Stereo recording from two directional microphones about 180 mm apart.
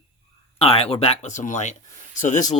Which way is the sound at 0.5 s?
35° left (ahead or behind).